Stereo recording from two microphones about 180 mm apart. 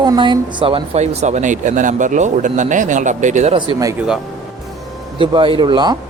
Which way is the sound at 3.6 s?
25° right (ahead or behind).